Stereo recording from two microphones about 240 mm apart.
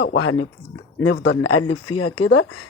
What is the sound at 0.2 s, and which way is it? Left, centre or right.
Speech, left.